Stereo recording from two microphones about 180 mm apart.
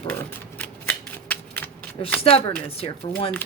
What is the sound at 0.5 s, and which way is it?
Shuffling cards, 10° left (ahead or behind).